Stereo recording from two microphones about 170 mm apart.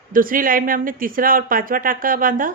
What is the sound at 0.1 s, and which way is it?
A woman's voice, 55° right (ahead or behind).